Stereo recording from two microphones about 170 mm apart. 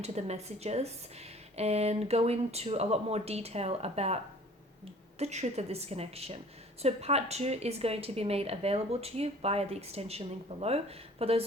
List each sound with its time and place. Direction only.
0.0 s a woman's voice: 40° right (ahead or behind)
5.2 s a woman's voice: 40° right (ahead or behind)